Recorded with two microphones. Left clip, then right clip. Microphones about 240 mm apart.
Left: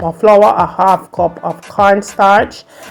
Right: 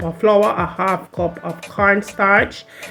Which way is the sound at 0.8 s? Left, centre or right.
Left.